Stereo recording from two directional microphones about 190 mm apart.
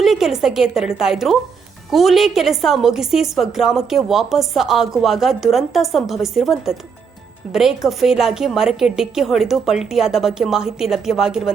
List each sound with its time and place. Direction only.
0.0 s a woman's voice: centre (ahead or behind)
7.9 s a woman's voice: centre (ahead or behind)